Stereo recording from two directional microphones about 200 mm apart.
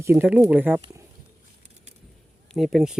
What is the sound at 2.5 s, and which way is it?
Speech, centre (ahead or behind).